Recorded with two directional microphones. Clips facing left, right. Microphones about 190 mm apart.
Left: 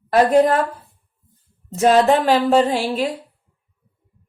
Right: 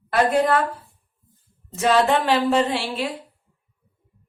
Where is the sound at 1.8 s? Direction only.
40° left (ahead or behind).